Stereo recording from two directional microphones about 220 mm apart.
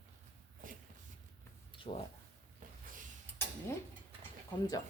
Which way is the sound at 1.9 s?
30° left (ahead or behind).